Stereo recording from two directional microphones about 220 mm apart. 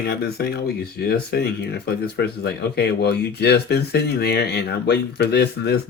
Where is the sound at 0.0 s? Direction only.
45° left (ahead or behind).